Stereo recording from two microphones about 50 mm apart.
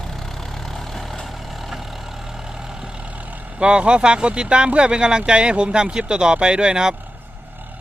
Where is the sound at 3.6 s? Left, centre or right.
Centre.